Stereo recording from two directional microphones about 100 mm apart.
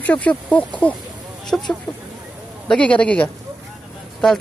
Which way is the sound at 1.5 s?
10° left (ahead or behind).